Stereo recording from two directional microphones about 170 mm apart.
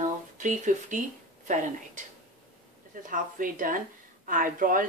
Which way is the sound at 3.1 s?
55° right (ahead or behind).